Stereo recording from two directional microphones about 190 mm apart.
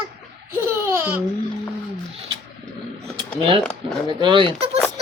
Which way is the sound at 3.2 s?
25° right (ahead or behind).